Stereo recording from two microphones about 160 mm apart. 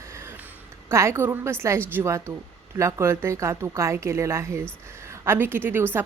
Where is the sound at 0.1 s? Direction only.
15° right (ahead or behind).